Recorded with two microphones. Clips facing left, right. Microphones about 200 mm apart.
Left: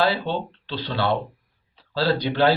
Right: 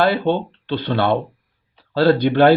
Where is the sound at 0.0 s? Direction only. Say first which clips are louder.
Right 5 dB; 55° right (ahead or behind).